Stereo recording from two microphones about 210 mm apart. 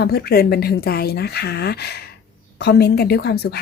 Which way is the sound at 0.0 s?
45° left (ahead or behind).